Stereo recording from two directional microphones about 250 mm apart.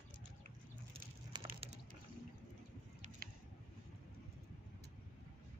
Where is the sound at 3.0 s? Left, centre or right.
Right.